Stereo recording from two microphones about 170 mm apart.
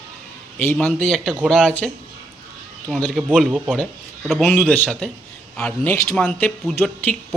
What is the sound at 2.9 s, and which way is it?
A man's voice, 5° left (ahead or behind).